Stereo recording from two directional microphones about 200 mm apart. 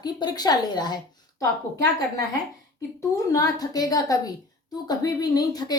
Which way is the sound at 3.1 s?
15° left (ahead or behind).